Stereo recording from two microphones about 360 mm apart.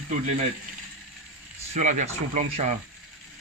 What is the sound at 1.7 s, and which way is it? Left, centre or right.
Speech, centre.